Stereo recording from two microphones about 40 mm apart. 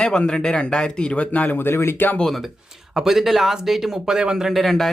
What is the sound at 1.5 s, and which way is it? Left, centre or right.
Speech, left.